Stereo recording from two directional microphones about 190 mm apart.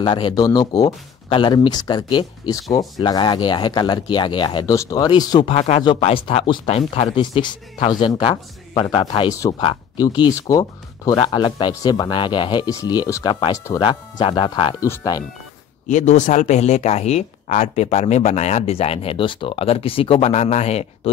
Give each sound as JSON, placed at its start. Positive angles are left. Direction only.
{"t": 0.0, "sound": "speech", "side_deg": 25}
{"t": 5.5, "sound": "speech", "side_deg": 35}
{"t": 15.9, "sound": "speech", "side_deg": 40}